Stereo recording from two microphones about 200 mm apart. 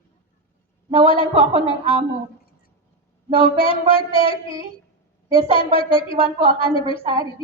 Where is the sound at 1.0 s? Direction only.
25° left (ahead or behind).